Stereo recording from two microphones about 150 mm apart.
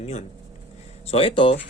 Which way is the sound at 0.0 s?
50° left (ahead or behind).